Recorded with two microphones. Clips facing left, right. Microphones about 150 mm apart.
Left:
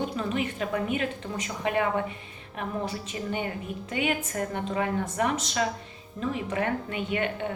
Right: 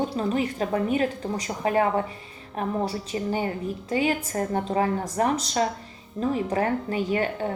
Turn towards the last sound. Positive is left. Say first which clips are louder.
# right 3 dB
turn(degrees=-35)  # may be behind; listen again after turning